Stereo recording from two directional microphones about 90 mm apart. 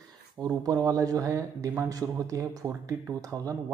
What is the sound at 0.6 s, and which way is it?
Speech, 40° right (ahead or behind).